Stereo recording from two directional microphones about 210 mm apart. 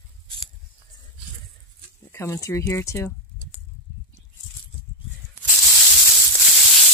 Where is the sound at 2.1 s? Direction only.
10° left (ahead or behind).